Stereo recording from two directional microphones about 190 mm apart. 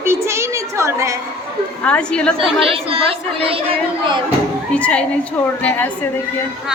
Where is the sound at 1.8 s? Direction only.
5° left (ahead or behind).